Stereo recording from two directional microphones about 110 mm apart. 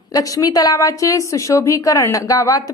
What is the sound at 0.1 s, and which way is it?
Speech, 35° left (ahead or behind).